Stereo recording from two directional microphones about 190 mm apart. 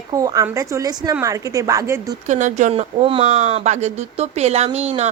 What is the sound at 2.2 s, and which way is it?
A woman's voice, 40° right (ahead or behind).